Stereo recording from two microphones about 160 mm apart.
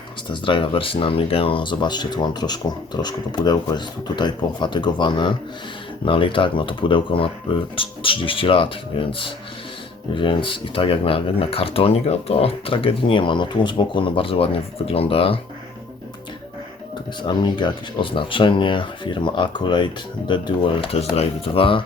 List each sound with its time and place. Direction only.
0.3 s speech: 30° left (ahead or behind)
17.2 s speech: 30° left (ahead or behind)